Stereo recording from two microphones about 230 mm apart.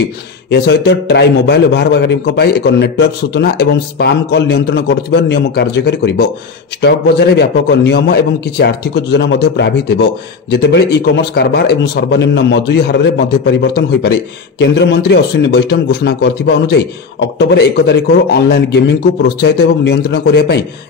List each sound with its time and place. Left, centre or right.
0.5 s a man's voice: left